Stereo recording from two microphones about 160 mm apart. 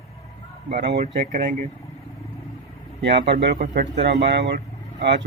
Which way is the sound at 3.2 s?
90° right.